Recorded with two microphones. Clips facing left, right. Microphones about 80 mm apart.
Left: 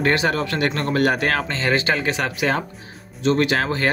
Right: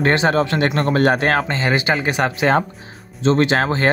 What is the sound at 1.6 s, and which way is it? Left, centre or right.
Speech, centre.